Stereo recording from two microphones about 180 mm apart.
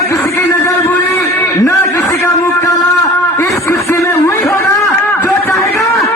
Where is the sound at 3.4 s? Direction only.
15° left (ahead or behind).